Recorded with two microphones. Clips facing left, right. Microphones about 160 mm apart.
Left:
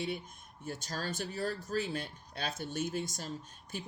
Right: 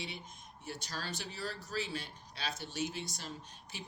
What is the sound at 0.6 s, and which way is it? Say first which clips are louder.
Speech: left 4 dB; 45° left (ahead or behind).